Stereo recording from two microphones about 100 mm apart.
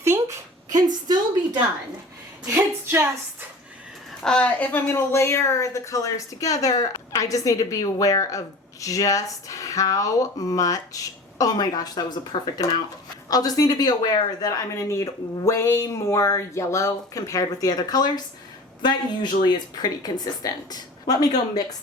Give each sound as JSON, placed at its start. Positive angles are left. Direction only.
{"t": 0.0, "sound": "a sound", "side_deg": -30}
{"t": 0.7, "sound": "a woman's voice", "side_deg": -40}
{"t": 2.5, "sound": "speech", "side_deg": -25}
{"t": 4.2, "sound": "a woman's voice", "side_deg": 10}
{"t": 4.9, "sound": "a woman's voice", "side_deg": 25}